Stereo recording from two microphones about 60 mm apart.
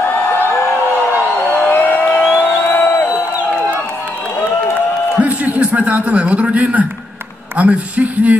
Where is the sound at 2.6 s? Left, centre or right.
Left.